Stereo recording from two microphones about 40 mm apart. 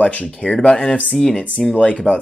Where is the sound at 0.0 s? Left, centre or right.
Left.